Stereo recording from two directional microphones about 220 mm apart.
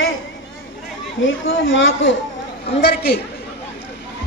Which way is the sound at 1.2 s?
60° left (ahead or behind).